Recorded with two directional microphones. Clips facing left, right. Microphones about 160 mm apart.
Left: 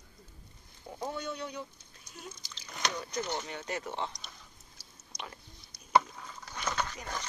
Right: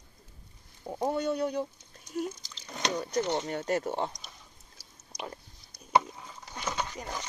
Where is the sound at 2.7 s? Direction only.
35° right (ahead or behind).